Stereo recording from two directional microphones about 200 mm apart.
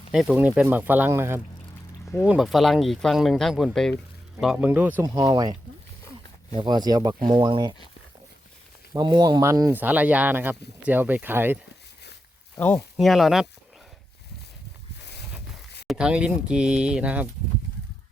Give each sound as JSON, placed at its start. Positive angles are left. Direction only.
{"t": 0.1, "sound": "speech", "side_deg": -5}
{"t": 8.9, "sound": "speech", "side_deg": -20}
{"t": 12.5, "sound": "speech", "side_deg": 5}
{"t": 15.9, "sound": "speech", "side_deg": -5}